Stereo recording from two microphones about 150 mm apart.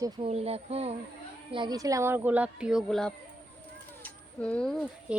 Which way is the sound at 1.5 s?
30° right (ahead or behind).